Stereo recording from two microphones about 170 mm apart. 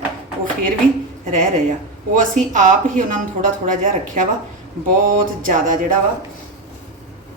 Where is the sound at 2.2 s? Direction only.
50° right (ahead or behind).